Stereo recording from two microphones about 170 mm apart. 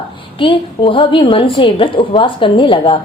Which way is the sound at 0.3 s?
30° left (ahead or behind).